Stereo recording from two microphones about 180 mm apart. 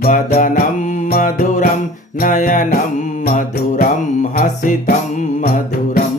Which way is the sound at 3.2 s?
55° left (ahead or behind).